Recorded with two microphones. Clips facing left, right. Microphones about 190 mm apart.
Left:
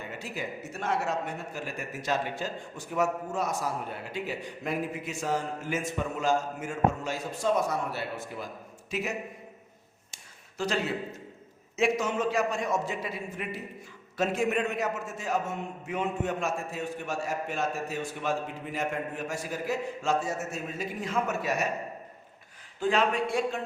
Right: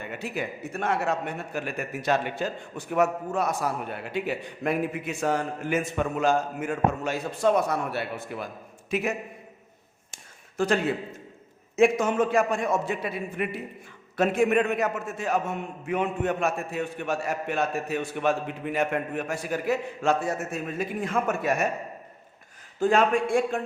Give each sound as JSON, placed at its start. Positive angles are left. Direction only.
{"t": 0.0, "sound": "a man's voice", "side_deg": -60}
{"t": 10.6, "sound": "a man's voice", "side_deg": -55}
{"t": 22.8, "sound": "a man's voice", "side_deg": -45}